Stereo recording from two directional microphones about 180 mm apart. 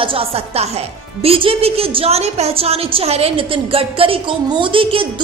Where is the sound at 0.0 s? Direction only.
30° right (ahead or behind).